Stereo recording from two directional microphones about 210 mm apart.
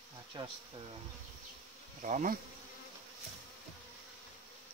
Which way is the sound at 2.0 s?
35° right (ahead or behind).